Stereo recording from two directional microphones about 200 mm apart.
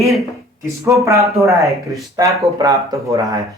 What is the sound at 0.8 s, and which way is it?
Speech, 15° right (ahead or behind).